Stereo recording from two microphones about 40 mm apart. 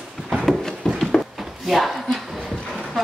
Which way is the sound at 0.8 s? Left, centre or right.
Left.